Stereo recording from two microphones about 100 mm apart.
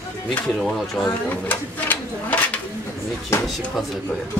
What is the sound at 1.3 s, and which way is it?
Speech, 20° left (ahead or behind).